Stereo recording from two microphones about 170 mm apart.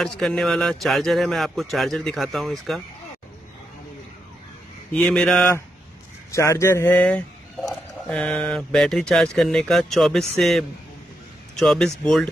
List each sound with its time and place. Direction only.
0.0 s speech: 5° left (ahead or behind)
4.9 s speech: 5° left (ahead or behind)
6.3 s speech: 15° left (ahead or behind)
11.6 s speech: centre (ahead or behind)